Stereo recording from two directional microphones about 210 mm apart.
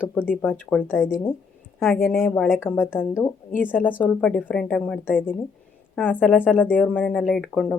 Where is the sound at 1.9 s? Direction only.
10° left (ahead or behind).